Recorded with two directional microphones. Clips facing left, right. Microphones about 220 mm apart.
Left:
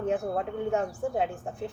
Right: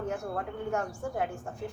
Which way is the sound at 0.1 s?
20° left (ahead or behind).